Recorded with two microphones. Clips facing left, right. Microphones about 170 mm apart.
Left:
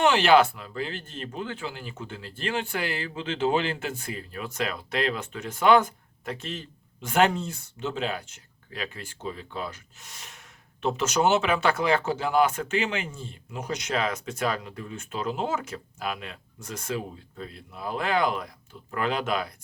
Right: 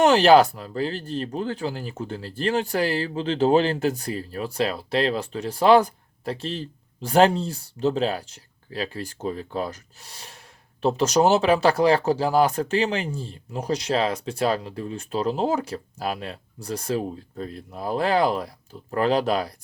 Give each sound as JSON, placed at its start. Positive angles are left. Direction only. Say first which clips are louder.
{"t": 0.0, "sound": "speech", "louder": "right 4 dB", "side_deg": -40}